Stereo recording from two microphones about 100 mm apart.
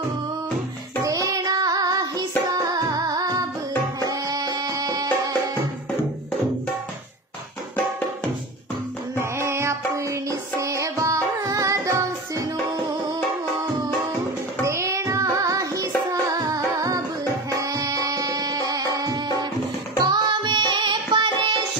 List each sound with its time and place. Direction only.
1.0 s child singing: 35° right (ahead or behind)
4.0 s tabla: 40° right (ahead or behind)
9.2 s music: 25° right (ahead or behind)
14.6 s music: 30° right (ahead or behind); by 21.6 s 50° right (ahead or behind)